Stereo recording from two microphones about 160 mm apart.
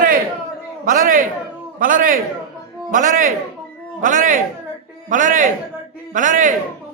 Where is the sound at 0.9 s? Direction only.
60° right (ahead or behind).